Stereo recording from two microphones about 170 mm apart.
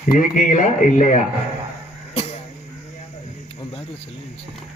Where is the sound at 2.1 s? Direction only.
35° left (ahead or behind).